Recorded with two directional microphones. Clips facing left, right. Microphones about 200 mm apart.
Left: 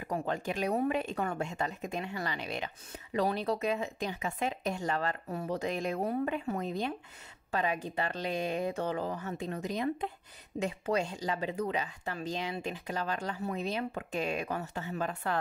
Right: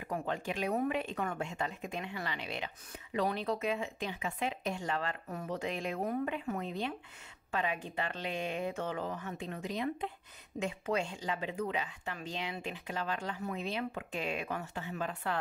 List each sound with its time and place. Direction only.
0.1 s speech: 40° left (ahead or behind)